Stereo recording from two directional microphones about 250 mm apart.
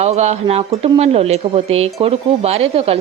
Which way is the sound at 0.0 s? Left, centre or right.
Right.